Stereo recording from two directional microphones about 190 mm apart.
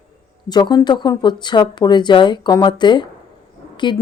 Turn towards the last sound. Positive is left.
turn(degrees=25)  # may be behind; listen again after turning